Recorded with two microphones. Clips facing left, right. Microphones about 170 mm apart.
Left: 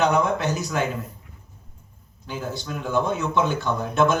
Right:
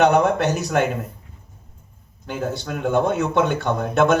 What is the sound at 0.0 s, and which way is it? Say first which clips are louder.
Speech: right 5 dB; 65° right (ahead or behind).